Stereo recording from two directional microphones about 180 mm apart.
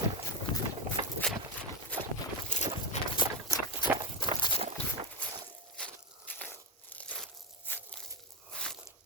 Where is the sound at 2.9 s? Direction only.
40° left (ahead or behind).